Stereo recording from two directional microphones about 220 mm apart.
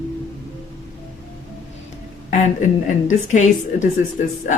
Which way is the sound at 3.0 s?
35° left (ahead or behind).